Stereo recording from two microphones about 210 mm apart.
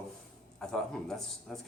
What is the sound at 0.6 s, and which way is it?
A man's voice, 5° left (ahead or behind).